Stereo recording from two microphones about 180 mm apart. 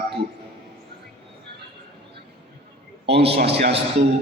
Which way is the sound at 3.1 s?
65° right (ahead or behind).